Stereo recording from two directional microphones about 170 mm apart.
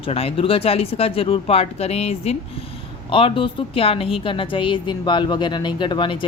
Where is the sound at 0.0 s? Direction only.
35° left (ahead or behind).